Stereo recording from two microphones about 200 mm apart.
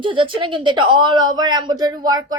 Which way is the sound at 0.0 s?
25° right (ahead or behind).